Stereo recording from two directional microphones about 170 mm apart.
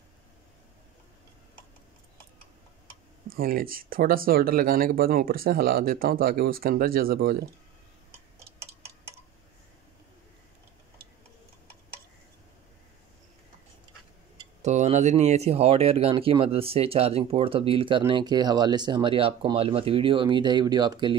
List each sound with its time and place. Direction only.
3.3 s speech: 60° right (ahead or behind)
14.6 s speech: 40° right (ahead or behind); by 21.2 s 25° right (ahead or behind)